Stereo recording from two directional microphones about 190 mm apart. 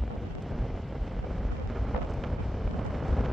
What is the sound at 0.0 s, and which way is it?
Vehicle, centre (ahead or behind).